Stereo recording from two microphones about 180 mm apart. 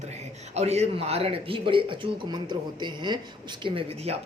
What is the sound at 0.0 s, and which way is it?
A man's voice, 40° right (ahead or behind).